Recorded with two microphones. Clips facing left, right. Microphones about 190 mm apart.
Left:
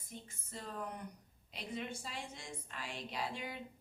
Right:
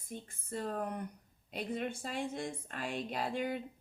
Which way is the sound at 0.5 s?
50° right (ahead or behind).